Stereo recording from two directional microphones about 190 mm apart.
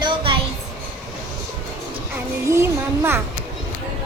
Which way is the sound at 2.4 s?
15° right (ahead or behind).